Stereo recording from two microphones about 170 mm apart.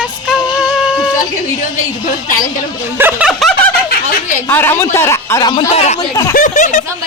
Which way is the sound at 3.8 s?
60° left (ahead or behind).